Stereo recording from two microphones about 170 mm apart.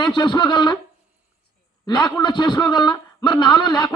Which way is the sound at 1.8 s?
25° left (ahead or behind).